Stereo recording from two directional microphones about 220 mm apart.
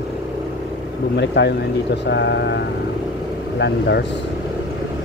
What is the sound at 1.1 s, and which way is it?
Speech, 50° left (ahead or behind).